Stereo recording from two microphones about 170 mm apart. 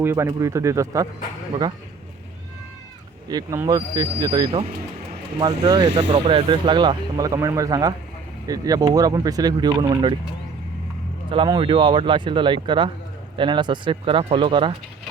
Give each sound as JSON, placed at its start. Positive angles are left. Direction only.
{"t": 0.0, "sound": "speech", "side_deg": -15}
{"t": 3.2, "sound": "speech", "side_deg": -25}
{"t": 11.3, "sound": "speech", "side_deg": -25}